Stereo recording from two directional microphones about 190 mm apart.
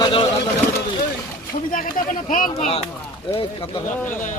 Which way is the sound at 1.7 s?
45° left (ahead or behind).